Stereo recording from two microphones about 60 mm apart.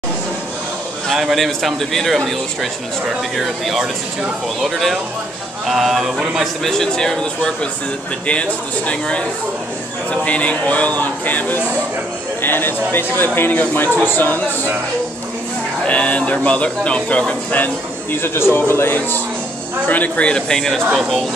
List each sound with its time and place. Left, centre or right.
1.1 s a man's voice: centre
6.7 s speech: centre
10.2 s speech: left
15.8 s speech: left
18.1 s speech: left; by 20.8 s centre
20.9 s a man's voice: centre